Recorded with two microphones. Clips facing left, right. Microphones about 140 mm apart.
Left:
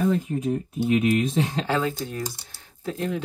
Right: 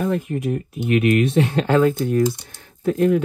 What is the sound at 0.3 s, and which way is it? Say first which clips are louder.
Speech: right 2 dB; 75° right (ahead or behind).